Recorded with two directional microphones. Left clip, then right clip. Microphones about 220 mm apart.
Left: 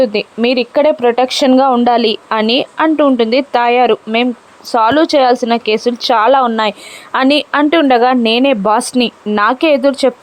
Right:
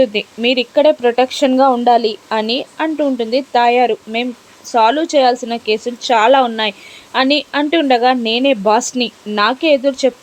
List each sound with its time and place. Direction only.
0.0 s a woman's voice: 10° left (ahead or behind)